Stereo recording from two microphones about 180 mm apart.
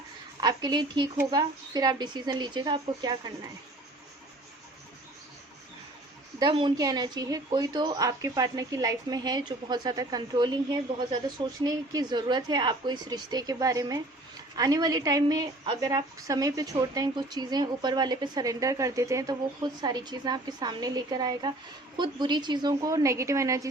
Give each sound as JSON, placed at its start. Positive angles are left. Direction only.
{"t": 0.3, "sound": "speech", "side_deg": -25}
{"t": 6.4, "sound": "speech", "side_deg": -25}
{"t": 11.6, "sound": "speech", "side_deg": -20}